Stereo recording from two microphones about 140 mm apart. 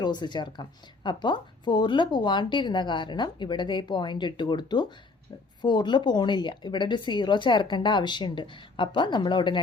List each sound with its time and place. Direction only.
0.0 s speech: 30° left (ahead or behind)